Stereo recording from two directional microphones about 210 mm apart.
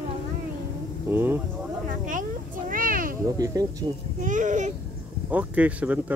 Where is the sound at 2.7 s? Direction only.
40° right (ahead or behind).